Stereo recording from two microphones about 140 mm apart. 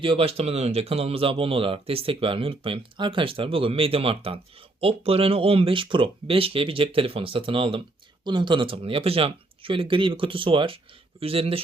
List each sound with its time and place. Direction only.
0.0 s speech: 40° right (ahead or behind)